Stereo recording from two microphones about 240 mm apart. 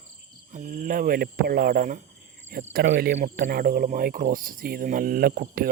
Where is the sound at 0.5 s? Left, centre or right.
Right.